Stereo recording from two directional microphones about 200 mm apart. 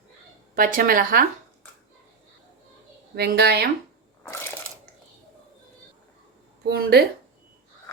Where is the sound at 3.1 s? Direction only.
55° right (ahead or behind).